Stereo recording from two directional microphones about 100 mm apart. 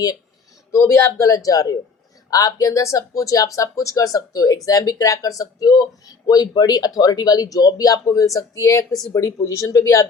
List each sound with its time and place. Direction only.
0.7 s speech: 30° left (ahead or behind)